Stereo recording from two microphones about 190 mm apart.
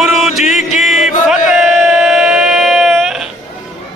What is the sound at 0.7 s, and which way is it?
Chant, centre (ahead or behind).